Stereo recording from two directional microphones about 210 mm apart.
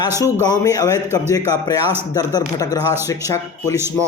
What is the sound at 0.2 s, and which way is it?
A man's voice, 20° left (ahead or behind).